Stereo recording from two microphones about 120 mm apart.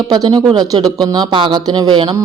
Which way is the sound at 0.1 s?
35° right (ahead or behind).